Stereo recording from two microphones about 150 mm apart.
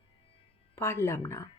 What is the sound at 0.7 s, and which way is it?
Speech, 15° left (ahead or behind).